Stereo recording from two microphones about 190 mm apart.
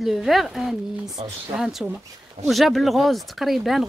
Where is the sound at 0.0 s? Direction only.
Centre (ahead or behind).